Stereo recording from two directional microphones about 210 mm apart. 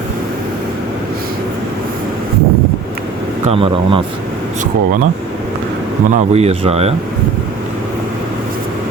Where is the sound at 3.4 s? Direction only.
25° right (ahead or behind).